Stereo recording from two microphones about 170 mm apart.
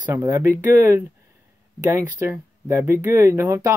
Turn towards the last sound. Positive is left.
turn(degrees=-15)  # may be behind; listen again after turning